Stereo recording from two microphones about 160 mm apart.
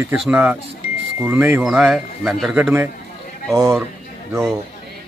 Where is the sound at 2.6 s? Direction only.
15° right (ahead or behind).